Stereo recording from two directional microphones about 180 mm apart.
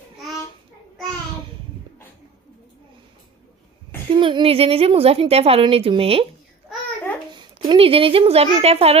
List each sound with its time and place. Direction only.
4.1 s a woman's voice: 30° right (ahead or behind)
7.3 s speech: 25° right (ahead or behind)